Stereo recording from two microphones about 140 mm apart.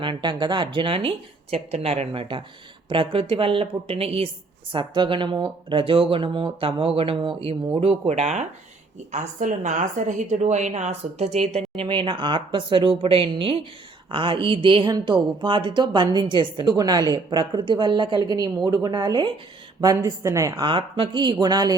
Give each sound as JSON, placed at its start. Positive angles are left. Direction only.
{"t": 0.0, "sound": "a woman's voice", "side_deg": -35}
{"t": 11.8, "sound": "a woman's voice", "side_deg": -35}
{"t": 20.7, "sound": "speech", "side_deg": -40}